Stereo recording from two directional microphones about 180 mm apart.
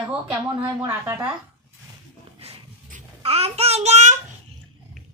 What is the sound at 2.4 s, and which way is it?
Child singing, 35° right (ahead or behind).